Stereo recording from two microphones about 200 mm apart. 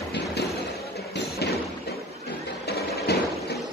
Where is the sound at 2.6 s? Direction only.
55° left (ahead or behind).